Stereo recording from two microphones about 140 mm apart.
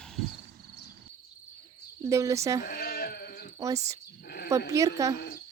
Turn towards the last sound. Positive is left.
turn(degrees=-25)  # may be behind; listen again after turning